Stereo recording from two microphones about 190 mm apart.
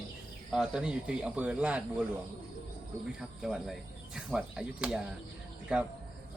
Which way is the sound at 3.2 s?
Centre (ahead or behind).